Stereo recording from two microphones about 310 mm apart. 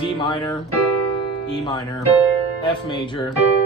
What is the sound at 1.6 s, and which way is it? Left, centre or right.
Speech, centre.